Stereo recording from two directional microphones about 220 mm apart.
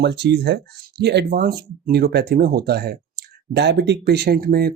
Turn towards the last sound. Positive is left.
turn(degrees=-45)  # may be behind; listen again after turning